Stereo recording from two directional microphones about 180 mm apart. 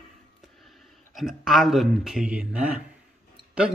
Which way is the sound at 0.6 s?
Centre (ahead or behind).